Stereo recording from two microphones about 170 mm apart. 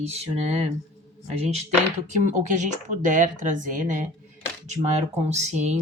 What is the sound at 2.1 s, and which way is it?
Speech, 45° right (ahead or behind).